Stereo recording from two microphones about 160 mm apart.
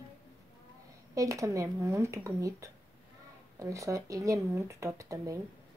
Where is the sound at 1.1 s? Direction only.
20° right (ahead or behind).